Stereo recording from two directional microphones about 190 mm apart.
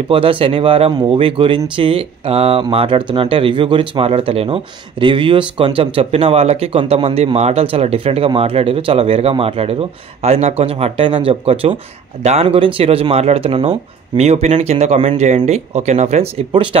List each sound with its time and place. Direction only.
0.1 s speech: 30° right (ahead or behind)